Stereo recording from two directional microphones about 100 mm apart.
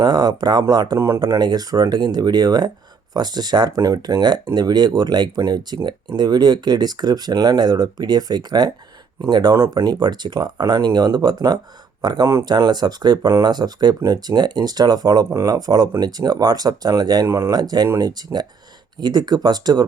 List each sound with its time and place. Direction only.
0.0 s speech: 45° right (ahead or behind)
0.9 s speech: 25° right (ahead or behind)
1.4 s speech: 45° right (ahead or behind)